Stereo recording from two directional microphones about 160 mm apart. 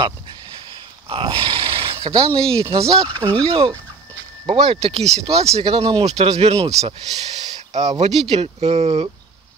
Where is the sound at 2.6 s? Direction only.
35° right (ahead or behind).